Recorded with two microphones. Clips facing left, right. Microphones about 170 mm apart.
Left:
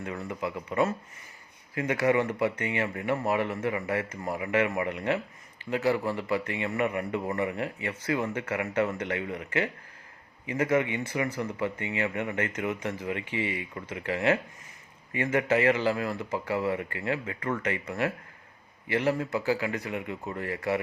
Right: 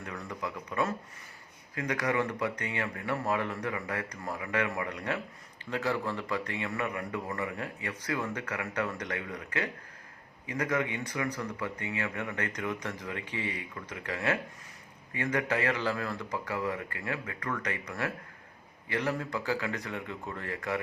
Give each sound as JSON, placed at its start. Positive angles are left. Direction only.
{"t": 0.0, "sound": "speech", "side_deg": 25}
{"t": 13.7, "sound": "speech", "side_deg": 25}